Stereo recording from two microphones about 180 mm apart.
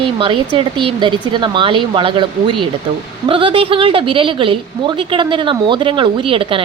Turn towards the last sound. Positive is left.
turn(degrees=-30)  # may be behind; listen again after turning